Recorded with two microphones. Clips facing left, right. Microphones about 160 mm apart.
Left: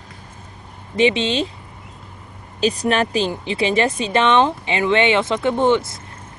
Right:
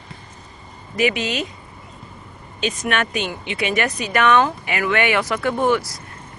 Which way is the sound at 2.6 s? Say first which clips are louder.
Left 4 dB; 35° left (ahead or behind).